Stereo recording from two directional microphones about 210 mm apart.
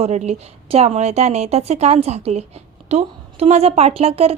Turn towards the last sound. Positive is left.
turn(degrees=-30)  # may be behind; listen again after turning